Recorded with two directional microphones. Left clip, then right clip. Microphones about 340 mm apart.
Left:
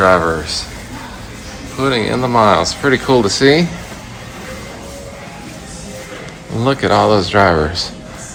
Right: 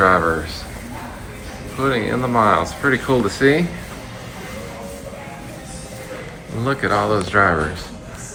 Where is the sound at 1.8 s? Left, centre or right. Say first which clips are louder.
Left 4 dB; centre.